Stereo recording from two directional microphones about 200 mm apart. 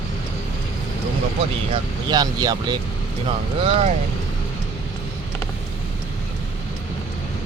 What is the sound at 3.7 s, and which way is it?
Speech, 30° right (ahead or behind).